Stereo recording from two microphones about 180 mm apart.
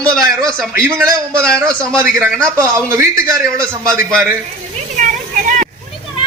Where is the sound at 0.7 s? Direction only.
20° right (ahead or behind).